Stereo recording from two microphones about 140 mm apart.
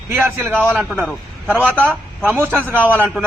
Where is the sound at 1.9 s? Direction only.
15° right (ahead or behind).